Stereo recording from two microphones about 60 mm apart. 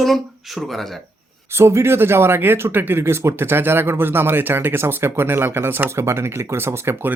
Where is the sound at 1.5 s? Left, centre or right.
Right.